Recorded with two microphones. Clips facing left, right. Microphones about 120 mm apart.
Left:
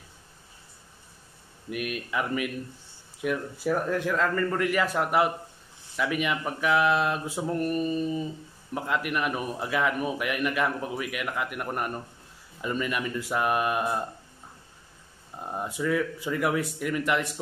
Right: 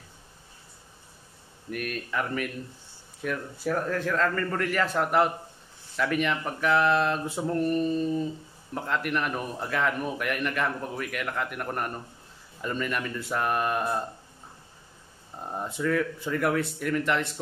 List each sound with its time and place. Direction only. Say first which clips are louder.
1.7 s a man's voice: left 1 dB; 10° left (ahead or behind)
15.5 s a man's voice: even; 5° left (ahead or behind)